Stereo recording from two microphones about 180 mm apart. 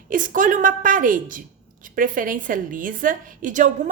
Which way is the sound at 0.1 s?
45° right (ahead or behind).